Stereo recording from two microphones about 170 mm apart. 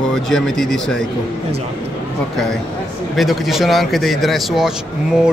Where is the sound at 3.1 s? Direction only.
Centre (ahead or behind).